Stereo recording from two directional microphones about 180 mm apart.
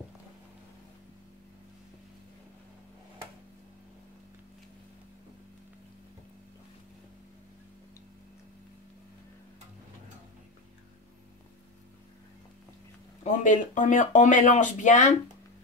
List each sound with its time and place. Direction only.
13.2 s speech: 45° left (ahead or behind)